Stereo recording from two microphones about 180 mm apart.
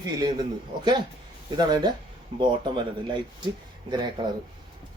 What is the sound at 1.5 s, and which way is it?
A man's voice, 25° right (ahead or behind).